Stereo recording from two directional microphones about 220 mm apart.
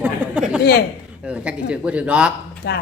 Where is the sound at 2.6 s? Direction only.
50° left (ahead or behind).